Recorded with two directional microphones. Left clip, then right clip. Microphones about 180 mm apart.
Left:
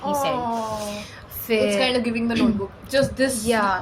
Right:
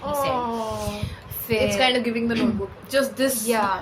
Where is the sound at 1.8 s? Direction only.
Centre (ahead or behind).